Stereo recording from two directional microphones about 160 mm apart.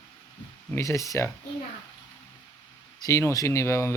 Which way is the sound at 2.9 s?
20° left (ahead or behind).